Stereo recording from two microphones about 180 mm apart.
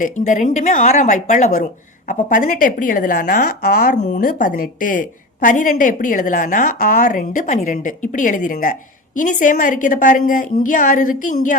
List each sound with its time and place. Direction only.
0.0 s a woman's voice: 45° left (ahead or behind)